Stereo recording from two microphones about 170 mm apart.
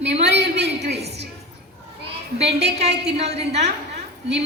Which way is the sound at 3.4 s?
40° right (ahead or behind).